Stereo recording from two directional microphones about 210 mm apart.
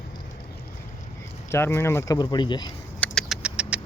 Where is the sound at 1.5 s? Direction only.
10° left (ahead or behind).